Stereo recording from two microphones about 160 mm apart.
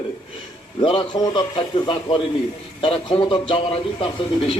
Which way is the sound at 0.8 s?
30° left (ahead or behind).